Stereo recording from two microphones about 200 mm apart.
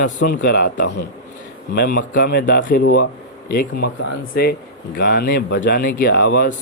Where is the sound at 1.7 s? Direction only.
50° left (ahead or behind).